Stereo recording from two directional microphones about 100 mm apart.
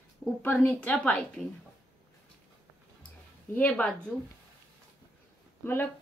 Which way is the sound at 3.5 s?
15° left (ahead or behind).